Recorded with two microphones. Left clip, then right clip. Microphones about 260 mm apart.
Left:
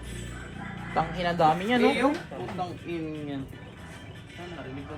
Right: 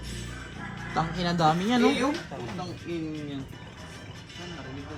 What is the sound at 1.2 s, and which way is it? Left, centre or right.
Speech, centre.